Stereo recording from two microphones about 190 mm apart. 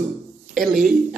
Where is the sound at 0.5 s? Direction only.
Centre (ahead or behind).